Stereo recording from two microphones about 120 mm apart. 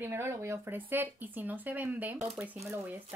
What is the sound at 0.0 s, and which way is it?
Speech, 20° right (ahead or behind).